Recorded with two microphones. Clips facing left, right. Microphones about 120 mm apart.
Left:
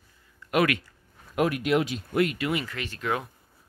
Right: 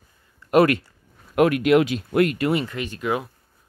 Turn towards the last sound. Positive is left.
turn(degrees=-15)  # may be behind; listen again after turning